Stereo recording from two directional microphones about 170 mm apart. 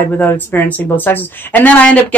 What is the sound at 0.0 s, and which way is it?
Speech, 10° left (ahead or behind).